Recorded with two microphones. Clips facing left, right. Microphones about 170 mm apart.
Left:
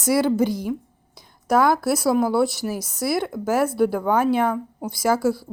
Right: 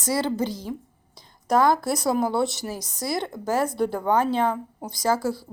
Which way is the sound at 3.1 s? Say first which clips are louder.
Left 4 dB; 15° right (ahead or behind).